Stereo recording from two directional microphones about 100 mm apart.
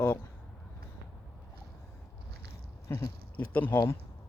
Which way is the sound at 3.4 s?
15° left (ahead or behind).